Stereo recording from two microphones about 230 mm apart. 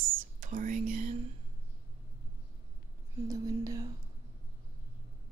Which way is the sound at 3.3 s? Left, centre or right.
Centre.